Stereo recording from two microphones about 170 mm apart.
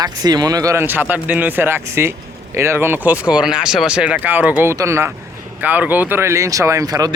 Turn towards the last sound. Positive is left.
turn(degrees=-20)  # may be behind; listen again after turning